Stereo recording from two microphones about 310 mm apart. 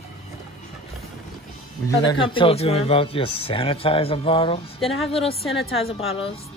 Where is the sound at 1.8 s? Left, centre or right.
Centre.